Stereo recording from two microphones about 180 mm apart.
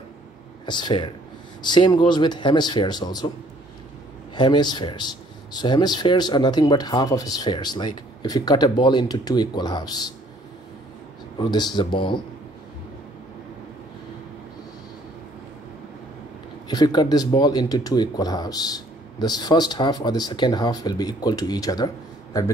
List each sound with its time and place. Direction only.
0.7 s speech: 25° left (ahead or behind)
4.4 s speech: 25° left (ahead or behind)
11.3 s speech: 25° left (ahead or behind)
16.6 s speech: 25° left (ahead or behind)